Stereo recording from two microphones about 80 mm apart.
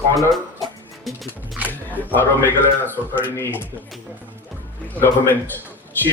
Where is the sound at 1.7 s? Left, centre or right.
Left.